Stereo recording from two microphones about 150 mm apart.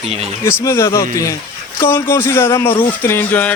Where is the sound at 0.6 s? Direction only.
20° left (ahead or behind).